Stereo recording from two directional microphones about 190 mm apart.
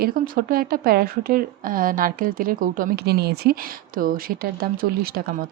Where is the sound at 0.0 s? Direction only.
50° right (ahead or behind).